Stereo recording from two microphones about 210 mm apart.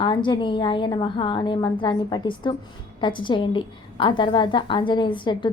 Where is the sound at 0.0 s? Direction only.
20° left (ahead or behind).